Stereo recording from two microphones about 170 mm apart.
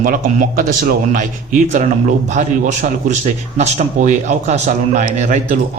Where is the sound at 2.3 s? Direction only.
45° right (ahead or behind).